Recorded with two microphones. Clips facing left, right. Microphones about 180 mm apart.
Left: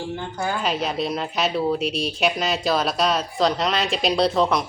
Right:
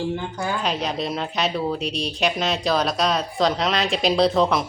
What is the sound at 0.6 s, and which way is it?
A woman's voice, centre (ahead or behind).